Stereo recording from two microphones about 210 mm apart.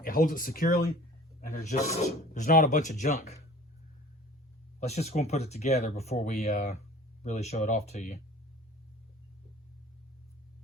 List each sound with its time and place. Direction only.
0.0 s a man's voice: 40° left (ahead or behind)
4.8 s speech: 30° left (ahead or behind)